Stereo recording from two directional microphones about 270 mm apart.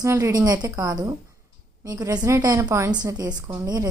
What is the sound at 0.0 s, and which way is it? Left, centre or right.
A woman's voice, centre.